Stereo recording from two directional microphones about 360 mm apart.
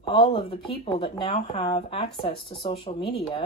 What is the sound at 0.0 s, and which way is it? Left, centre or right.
Speech, centre.